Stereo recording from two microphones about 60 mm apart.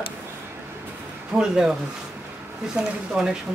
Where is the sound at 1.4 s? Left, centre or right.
Centre.